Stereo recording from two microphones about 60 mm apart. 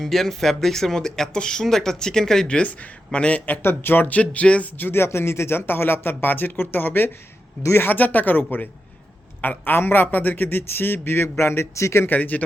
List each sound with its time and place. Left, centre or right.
0.0 s speech: centre
2.6 s speech: left
3.4 s speech: left
4.8 s a man's voice: left
12.0 s speech: left